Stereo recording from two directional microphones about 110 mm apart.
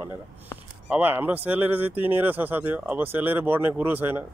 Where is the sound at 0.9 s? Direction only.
20° right (ahead or behind).